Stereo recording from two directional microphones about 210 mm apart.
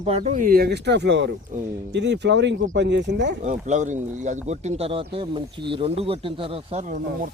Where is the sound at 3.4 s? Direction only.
35° right (ahead or behind).